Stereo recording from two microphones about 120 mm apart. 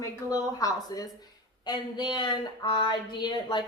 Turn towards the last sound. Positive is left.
turn(degrees=40)  # may be behind; listen again after turning